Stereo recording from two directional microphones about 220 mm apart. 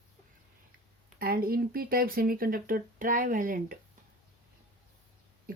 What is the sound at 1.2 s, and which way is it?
Speech, 40° right (ahead or behind).